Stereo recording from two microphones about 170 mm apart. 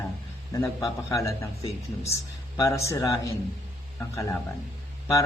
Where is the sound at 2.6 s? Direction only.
20° left (ahead or behind).